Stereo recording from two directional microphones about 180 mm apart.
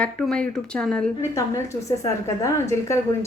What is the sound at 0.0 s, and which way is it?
Speech, 5° left (ahead or behind).